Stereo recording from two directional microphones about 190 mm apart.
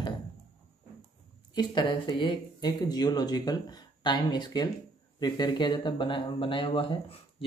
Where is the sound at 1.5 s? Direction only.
25° left (ahead or behind).